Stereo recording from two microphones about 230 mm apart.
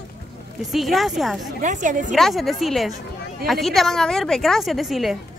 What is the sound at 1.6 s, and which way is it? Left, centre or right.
Speech, right.